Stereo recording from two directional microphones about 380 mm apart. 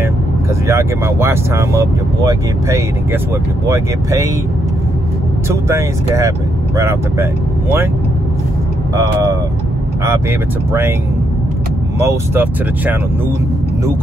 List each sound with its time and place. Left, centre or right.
0.7 s speech: centre
5.5 s speech: centre
8.9 s speech: centre
10.7 s speech: centre
12.0 s speech: centre